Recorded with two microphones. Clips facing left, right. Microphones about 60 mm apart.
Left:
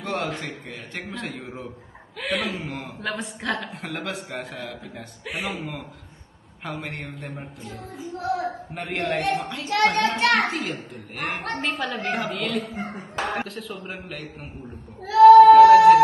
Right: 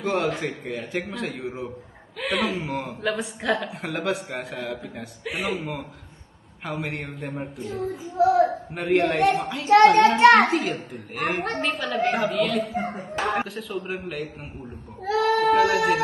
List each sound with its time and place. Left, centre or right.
0.0 s a woman's voice: centre
10.2 s a child's voice: right
10.5 s a woman's voice: centre
15.4 s a sound: centre